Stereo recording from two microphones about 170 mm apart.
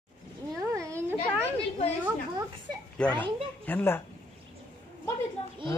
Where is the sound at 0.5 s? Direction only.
20° right (ahead or behind).